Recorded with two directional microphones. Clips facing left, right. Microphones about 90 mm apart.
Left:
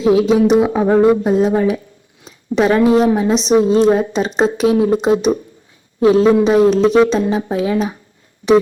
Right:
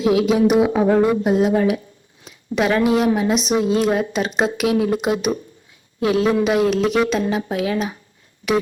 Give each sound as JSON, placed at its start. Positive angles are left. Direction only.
{"t": 0.0, "sound": "a woman's voice", "side_deg": 30}